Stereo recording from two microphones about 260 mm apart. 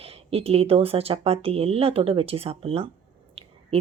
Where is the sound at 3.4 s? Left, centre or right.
Right.